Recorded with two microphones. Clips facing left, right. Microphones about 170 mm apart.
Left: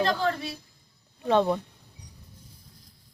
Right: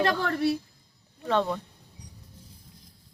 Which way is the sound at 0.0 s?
65° right (ahead or behind).